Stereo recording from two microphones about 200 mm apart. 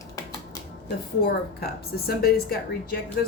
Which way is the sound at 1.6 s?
50° left (ahead or behind).